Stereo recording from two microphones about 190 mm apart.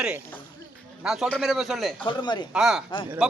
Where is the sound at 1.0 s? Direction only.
Centre (ahead or behind).